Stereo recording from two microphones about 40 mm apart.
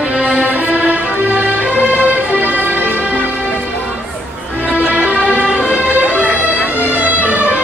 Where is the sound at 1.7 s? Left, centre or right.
Left.